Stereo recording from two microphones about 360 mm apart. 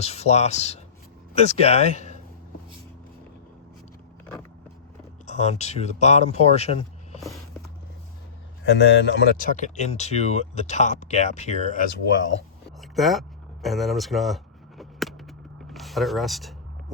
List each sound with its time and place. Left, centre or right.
0.0 s speech: centre
5.2 s speech: centre
8.7 s speech: left
12.8 s a sound: centre